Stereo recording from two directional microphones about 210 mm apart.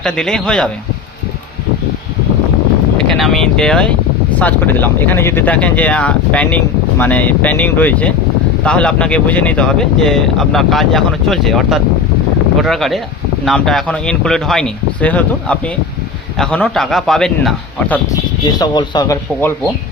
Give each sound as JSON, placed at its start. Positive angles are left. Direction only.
{"t": 0.0, "sound": "speech", "side_deg": 5}
{"t": 3.2, "sound": "speech", "side_deg": 0}
{"t": 18.6, "sound": "speech", "side_deg": 20}